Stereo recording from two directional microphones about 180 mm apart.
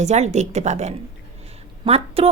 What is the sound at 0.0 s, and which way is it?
A woman's voice, 40° right (ahead or behind).